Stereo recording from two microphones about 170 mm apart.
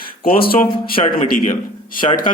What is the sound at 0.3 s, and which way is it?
A man's voice, 60° left (ahead or behind).